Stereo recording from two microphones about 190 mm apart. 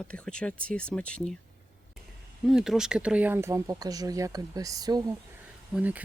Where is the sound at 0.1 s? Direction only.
5° left (ahead or behind).